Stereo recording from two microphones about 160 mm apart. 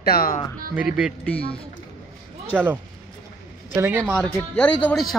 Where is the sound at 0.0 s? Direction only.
70° left (ahead or behind).